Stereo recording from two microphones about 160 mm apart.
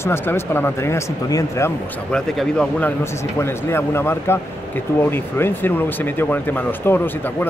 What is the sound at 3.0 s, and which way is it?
Speech, 15° left (ahead or behind).